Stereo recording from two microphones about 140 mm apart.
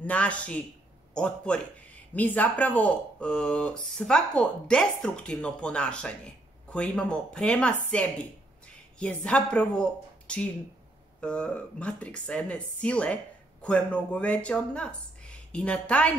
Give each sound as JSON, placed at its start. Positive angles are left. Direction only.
{"t": 0.0, "sound": "speech", "side_deg": 10}